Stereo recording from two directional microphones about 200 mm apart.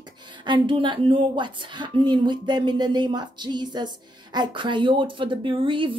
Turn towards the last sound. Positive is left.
turn(degrees=-25)  # may be behind; listen again after turning